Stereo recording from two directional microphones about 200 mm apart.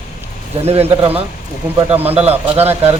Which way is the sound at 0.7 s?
30° right (ahead or behind).